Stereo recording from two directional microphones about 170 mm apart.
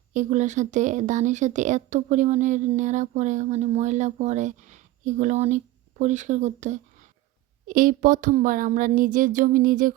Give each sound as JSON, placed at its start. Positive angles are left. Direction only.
{"t": 0.1, "sound": "speech", "side_deg": -45}
{"t": 7.7, "sound": "speech", "side_deg": -55}